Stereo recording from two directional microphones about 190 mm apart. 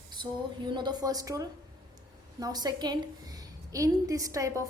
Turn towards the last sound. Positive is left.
turn(degrees=-15)  # may be behind; listen again after turning